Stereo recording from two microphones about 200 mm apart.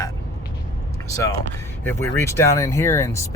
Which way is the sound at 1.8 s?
10° left (ahead or behind).